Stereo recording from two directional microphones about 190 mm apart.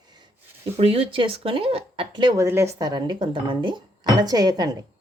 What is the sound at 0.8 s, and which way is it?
Speech, 30° right (ahead or behind).